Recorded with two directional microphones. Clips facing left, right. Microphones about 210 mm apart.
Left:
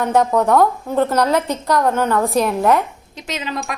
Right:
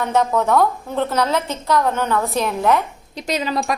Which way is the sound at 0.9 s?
10° left (ahead or behind).